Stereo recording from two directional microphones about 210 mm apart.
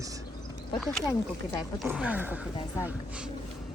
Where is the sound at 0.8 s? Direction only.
Centre (ahead or behind).